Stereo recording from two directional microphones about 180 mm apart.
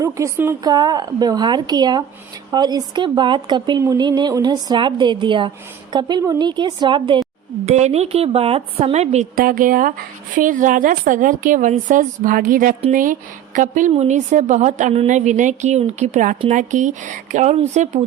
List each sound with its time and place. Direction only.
0.0 s speech: 15° right (ahead or behind)
7.6 s a woman's voice: 40° right (ahead or behind)
9.4 s a woman's voice: 50° right (ahead or behind)